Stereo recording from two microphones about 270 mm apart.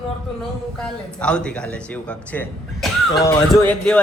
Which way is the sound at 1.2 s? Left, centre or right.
Centre.